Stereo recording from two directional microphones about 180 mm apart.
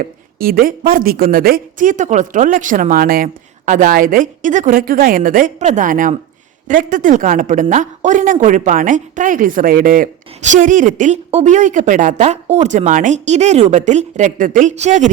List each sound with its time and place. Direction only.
0.0 s speech: 55° right (ahead or behind)